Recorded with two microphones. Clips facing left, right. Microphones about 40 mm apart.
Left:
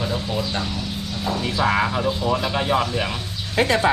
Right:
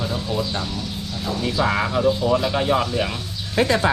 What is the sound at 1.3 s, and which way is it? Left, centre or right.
Speech, centre.